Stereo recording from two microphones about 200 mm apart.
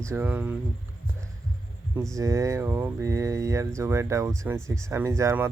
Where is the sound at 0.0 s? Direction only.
10° right (ahead or behind).